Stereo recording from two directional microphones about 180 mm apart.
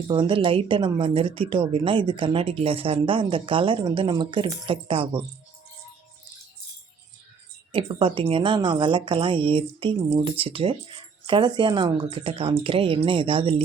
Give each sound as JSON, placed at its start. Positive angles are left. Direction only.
{"t": 0.1, "sound": "speech", "side_deg": -25}
{"t": 7.7, "sound": "speech", "side_deg": -30}